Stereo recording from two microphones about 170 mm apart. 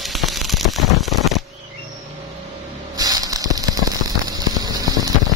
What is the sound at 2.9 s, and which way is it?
Fireworks, 20° right (ahead or behind).